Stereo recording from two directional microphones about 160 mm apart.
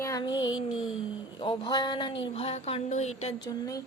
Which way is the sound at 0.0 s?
25° left (ahead or behind).